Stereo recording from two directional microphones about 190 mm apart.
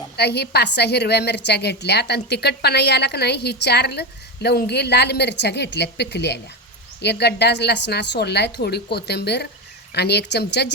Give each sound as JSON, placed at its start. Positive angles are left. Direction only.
{"t": 0.2, "sound": "a woman's voice", "side_deg": 60}